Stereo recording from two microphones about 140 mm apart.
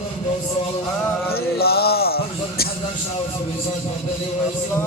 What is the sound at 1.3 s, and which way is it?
A man's voice, 90° left.